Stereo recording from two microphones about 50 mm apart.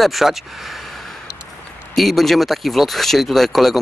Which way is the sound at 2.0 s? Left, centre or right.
Centre.